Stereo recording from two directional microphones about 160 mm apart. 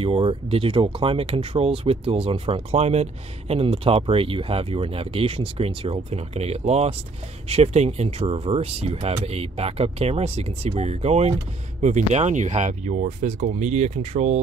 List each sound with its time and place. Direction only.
0.0 s speech: 35° right (ahead or behind)